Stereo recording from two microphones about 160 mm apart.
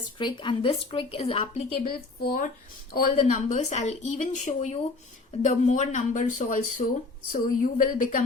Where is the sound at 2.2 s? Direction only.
65° left (ahead or behind).